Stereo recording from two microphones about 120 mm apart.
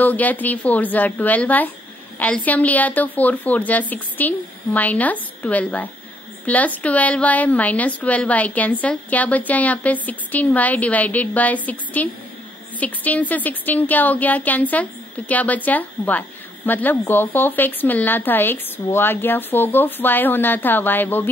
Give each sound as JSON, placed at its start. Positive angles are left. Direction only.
{"t": 0.0, "sound": "speech", "side_deg": 15}